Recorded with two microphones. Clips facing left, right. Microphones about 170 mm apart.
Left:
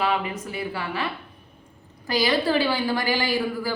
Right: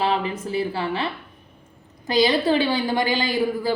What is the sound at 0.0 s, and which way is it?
A woman's voice, 30° right (ahead or behind).